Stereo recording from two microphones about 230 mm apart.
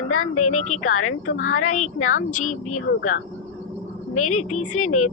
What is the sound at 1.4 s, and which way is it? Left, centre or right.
Speech, left.